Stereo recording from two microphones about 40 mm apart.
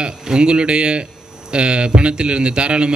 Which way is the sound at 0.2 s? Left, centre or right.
Right.